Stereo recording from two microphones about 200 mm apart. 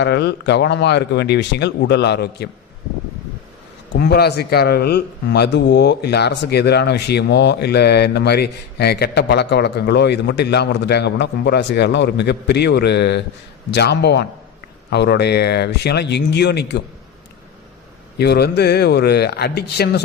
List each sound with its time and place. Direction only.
0.0 s speech: 55° left (ahead or behind)
3.9 s speech: 55° left (ahead or behind)
18.2 s speech: 55° left (ahead or behind)